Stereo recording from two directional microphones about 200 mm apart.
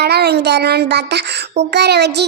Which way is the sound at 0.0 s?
55° right (ahead or behind).